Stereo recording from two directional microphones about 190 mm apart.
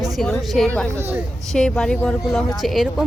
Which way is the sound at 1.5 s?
5° left (ahead or behind).